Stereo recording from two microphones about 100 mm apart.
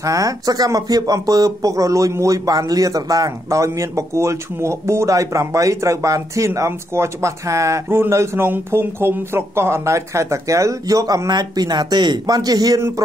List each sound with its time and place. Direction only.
0.0 s speech: 35° right (ahead or behind)